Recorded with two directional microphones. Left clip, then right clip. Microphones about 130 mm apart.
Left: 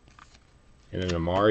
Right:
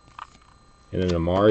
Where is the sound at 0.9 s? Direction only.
Centre (ahead or behind).